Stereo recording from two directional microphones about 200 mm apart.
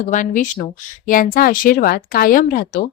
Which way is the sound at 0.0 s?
40° left (ahead or behind).